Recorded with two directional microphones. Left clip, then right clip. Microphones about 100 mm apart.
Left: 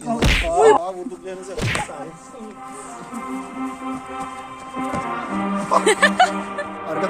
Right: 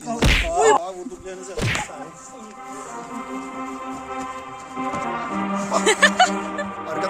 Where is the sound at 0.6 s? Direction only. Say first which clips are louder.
Left 3 dB; 60° right (ahead or behind).